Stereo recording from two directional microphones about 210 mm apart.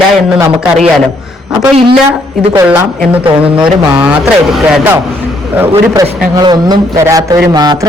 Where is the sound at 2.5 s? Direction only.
15° right (ahead or behind).